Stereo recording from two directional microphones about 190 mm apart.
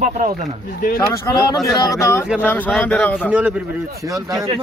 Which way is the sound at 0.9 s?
15° left (ahead or behind).